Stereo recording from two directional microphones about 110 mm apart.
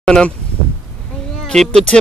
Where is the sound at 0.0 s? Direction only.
5° left (ahead or behind).